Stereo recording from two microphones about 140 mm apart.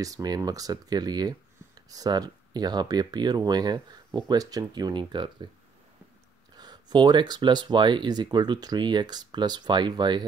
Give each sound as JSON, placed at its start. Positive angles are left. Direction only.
{"t": 0.0, "sound": "speech", "side_deg": -25}
{"t": 6.5, "sound": "speech", "side_deg": -30}